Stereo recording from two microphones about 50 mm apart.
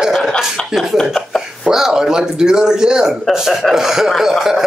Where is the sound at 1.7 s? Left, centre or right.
Centre.